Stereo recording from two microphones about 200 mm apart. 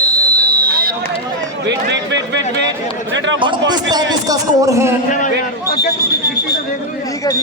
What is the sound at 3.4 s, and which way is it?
A man's voice, 20° right (ahead or behind).